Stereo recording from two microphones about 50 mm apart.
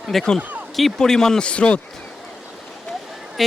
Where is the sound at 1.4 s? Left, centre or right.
Left.